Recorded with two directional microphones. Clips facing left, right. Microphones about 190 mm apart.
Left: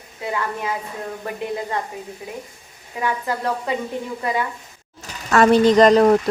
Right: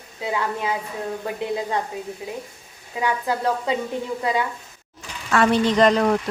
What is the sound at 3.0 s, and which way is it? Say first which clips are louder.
Speech: right 1 dB; 15° right (ahead or behind).